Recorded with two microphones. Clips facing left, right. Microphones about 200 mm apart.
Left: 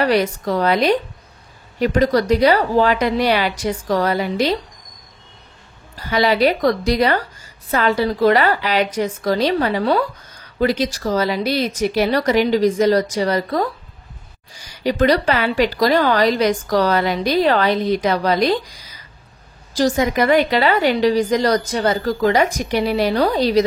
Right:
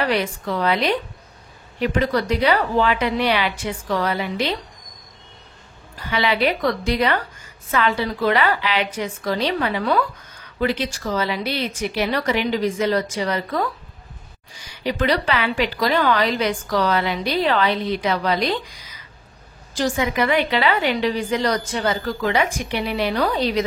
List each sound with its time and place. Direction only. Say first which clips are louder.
0.0 s a woman's voice: left 5 dB; 40° left (ahead or behind)
5.9 s a woman's voice: left 5 dB; 40° left (ahead or behind)